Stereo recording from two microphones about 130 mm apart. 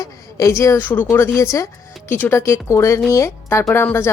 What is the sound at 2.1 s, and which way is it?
Speech, 15° left (ahead or behind).